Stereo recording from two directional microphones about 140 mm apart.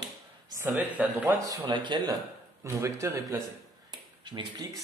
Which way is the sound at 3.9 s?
30° right (ahead or behind).